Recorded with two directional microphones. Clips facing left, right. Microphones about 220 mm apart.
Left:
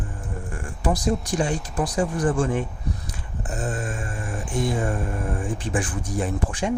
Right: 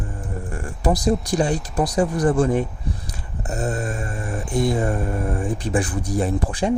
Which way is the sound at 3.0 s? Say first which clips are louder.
Right 2 dB; 40° right (ahead or behind).